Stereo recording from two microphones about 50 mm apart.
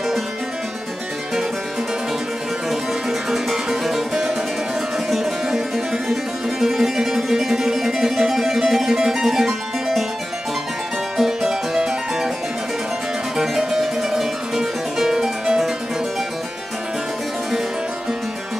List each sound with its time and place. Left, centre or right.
2.7 s music: centre
6.6 s music: centre
11.1 s music: centre
13.4 s music: centre